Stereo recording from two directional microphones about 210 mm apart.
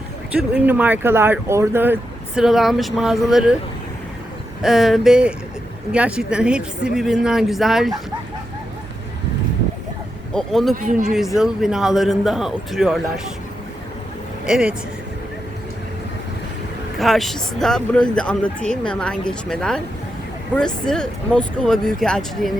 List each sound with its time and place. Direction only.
0.3 s speech: 5° right (ahead or behind)
4.6 s speech: centre (ahead or behind)
10.3 s speech: centre (ahead or behind)
10.8 s speech: 40° right (ahead or behind)
11.3 s speech: centre (ahead or behind)
14.4 s speech: 5° right (ahead or behind)
17.0 s speech: centre (ahead or behind)
20.8 s speech: 5° left (ahead or behind)